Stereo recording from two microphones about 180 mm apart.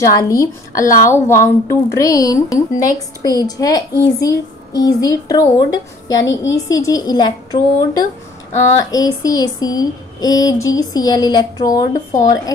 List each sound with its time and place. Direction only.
0.0 s a woman's voice: 20° left (ahead or behind)